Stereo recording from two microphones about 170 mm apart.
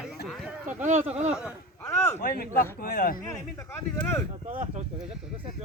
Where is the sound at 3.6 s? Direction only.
10° left (ahead or behind).